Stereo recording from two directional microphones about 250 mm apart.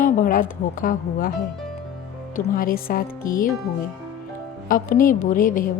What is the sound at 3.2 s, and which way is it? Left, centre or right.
Speech, centre.